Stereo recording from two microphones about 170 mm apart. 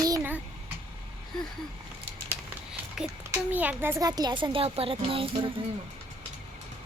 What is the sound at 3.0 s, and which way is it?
A child's voice, 5° right (ahead or behind).